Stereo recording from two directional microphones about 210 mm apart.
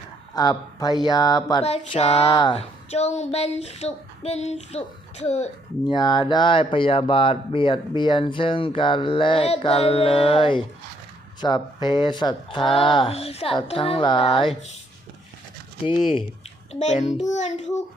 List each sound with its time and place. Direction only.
0.3 s speech: 20° left (ahead or behind)
1.6 s speech: 30° left (ahead or behind)
5.8 s speech: 20° left (ahead or behind)
16.8 s speech: 30° left (ahead or behind)